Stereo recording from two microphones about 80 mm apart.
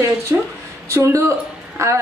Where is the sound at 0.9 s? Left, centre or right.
Right.